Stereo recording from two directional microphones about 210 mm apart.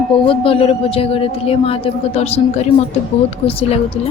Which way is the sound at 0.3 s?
25° left (ahead or behind).